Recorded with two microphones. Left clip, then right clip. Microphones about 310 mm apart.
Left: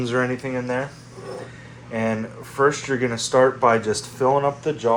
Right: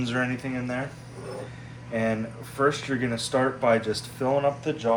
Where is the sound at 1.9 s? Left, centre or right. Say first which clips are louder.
Left 3 dB; left.